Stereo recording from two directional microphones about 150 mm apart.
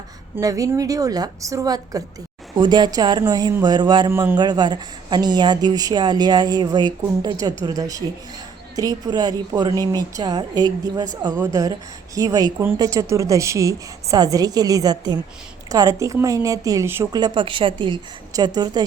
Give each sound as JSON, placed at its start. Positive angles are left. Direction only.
{"t": 0.3, "sound": "a woman's voice", "side_deg": -20}
{"t": 4.1, "sound": "a man's voice", "side_deg": -15}
{"t": 4.4, "sound": "a woman's voice", "side_deg": -30}